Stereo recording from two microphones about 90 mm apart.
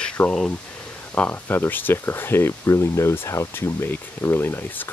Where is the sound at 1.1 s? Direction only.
20° left (ahead or behind).